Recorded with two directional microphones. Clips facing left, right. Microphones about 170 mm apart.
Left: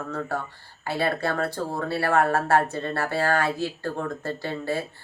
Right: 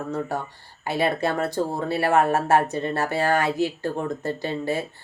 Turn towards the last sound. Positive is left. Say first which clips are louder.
# right 2 dB
turn(degrees=-20)  # may be behind; listen again after turning